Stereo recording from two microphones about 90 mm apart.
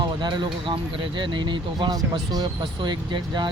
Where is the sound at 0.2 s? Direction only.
55° right (ahead or behind).